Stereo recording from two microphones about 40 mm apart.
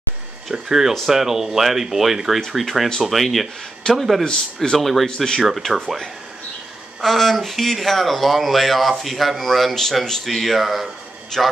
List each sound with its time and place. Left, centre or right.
0.5 s speech: centre
4.2 s a man's voice: centre
4.7 s speech: centre
5.0 s a man's voice: centre
7.0 s speech: centre
11.3 s a man's voice: centre